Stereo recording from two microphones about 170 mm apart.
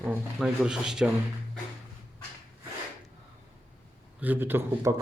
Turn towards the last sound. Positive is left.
turn(degrees=-10)  # may be behind; listen again after turning